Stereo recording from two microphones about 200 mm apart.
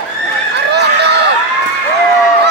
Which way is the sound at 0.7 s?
55° right (ahead or behind).